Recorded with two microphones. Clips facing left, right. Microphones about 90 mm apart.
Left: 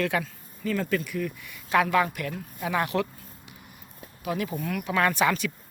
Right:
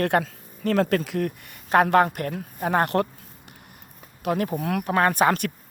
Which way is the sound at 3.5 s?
55° right (ahead or behind).